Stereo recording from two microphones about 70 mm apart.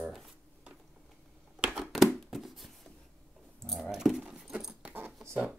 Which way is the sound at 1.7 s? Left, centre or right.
Centre.